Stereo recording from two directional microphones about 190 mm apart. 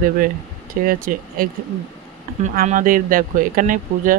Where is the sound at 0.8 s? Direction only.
50° right (ahead or behind).